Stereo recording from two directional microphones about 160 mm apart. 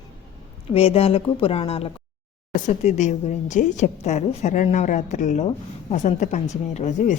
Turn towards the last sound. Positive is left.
turn(degrees=45)  # may be behind; listen again after turning